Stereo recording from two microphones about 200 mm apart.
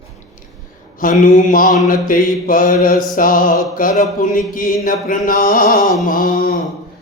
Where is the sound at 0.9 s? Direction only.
40° left (ahead or behind).